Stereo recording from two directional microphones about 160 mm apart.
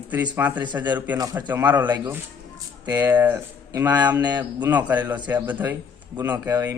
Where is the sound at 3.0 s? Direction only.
10° right (ahead or behind).